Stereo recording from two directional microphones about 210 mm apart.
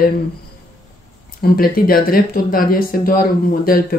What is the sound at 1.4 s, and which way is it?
Speech, 45° left (ahead or behind).